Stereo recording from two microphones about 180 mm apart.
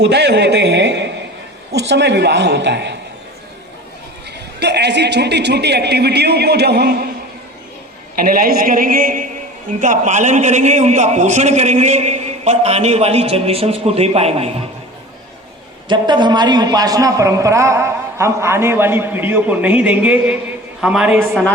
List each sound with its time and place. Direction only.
0.0 s a man's voice: 70° right (ahead or behind)
4.6 s a man's voice: 70° right (ahead or behind)
8.1 s a man's voice: 55° right (ahead or behind); by 14.5 s 35° right (ahead or behind)
15.9 s a man's voice: 25° right (ahead or behind); by 21.4 s 5° right (ahead or behind)